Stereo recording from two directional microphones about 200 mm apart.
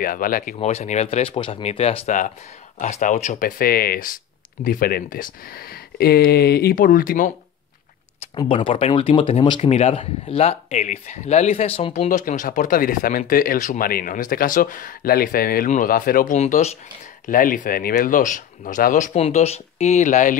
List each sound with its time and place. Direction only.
0.0 s speech: 45° left (ahead or behind)
8.4 s speech: 25° left (ahead or behind)